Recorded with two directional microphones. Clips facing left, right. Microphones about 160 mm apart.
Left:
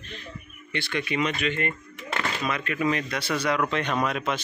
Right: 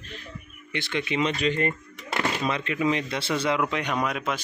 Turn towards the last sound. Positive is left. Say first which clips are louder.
# left 1 dB
turn(degrees=-5)  # may be behind; listen again after turning